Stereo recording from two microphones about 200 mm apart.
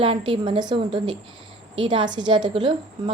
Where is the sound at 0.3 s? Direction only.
25° right (ahead or behind).